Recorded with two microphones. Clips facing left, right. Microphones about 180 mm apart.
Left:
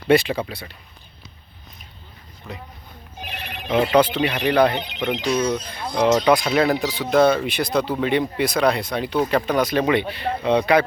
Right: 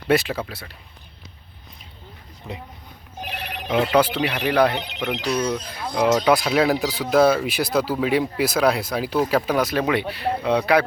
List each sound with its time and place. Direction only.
0.1 s speech: centre (ahead or behind)
2.5 s speech: 20° right (ahead or behind)
3.2 s speech: 10° right (ahead or behind)